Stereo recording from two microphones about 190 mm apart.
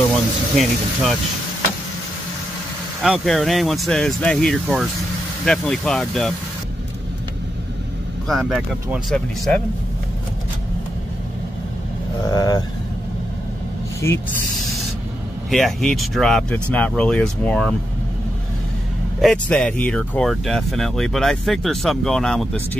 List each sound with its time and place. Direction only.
0.1 s speech: centre (ahead or behind)
3.0 s speech: centre (ahead or behind)
8.3 s speech: centre (ahead or behind)
12.3 s speech: 20° left (ahead or behind)
15.5 s speech: centre (ahead or behind)
19.2 s speech: 5° left (ahead or behind)